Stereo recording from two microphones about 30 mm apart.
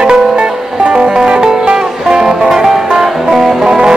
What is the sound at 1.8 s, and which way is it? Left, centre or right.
Music, right.